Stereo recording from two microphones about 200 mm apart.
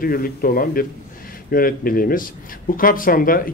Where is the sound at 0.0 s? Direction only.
45° left (ahead or behind).